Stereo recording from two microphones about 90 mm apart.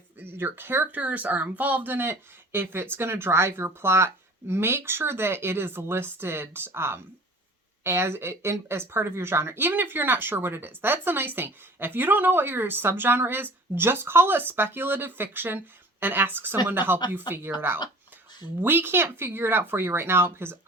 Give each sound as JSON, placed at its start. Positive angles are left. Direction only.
{"t": 0.2, "sound": "speech", "side_deg": -25}
{"t": 18.6, "sound": "speech", "side_deg": -25}